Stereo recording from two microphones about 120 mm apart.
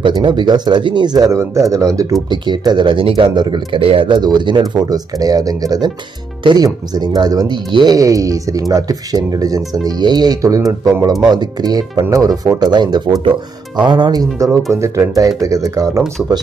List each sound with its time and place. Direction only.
0.1 s speech: 40° right (ahead or behind)
2.2 s speech: 40° right (ahead or behind)
14.7 s speech: 25° right (ahead or behind)